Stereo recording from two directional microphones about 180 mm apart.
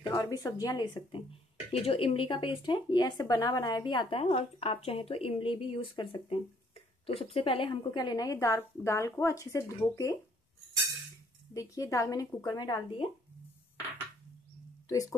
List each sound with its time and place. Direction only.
0.1 s speech: 20° left (ahead or behind)
11.5 s speech: 15° left (ahead or behind)
14.9 s speech: 20° left (ahead or behind)